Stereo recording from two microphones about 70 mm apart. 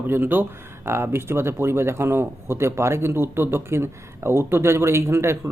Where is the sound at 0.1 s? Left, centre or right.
Right.